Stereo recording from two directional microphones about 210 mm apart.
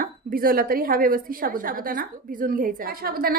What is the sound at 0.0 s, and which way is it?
A woman's voice, 45° right (ahead or behind).